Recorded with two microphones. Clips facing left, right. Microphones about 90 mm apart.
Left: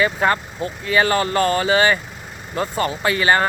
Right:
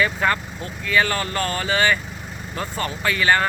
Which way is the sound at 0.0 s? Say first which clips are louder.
Left 3 dB; 25° left (ahead or behind).